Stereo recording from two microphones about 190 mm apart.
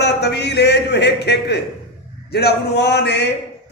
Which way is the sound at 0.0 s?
65° left (ahead or behind).